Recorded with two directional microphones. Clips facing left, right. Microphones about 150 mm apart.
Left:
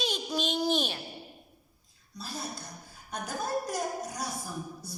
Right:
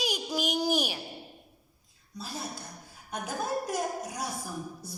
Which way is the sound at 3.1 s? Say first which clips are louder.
Right 1 dB; 5° right (ahead or behind).